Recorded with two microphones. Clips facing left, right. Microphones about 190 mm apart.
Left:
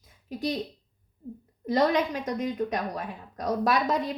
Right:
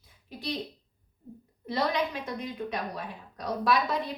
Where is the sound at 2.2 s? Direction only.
45° left (ahead or behind).